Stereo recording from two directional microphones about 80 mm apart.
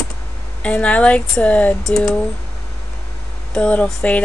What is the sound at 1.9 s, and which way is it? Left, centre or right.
Speech, centre.